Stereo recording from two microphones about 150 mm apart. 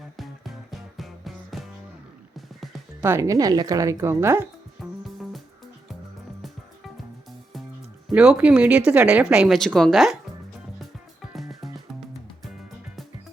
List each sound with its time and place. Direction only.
0.2 s music: centre (ahead or behind)
3.0 s speech: 15° right (ahead or behind)
4.8 s music: centre (ahead or behind)
6.4 s music: centre (ahead or behind)
8.1 s speech: 5° right (ahead or behind)
11.2 s music: centre (ahead or behind)